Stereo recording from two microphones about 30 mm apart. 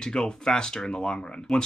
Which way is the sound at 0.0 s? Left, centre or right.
Left.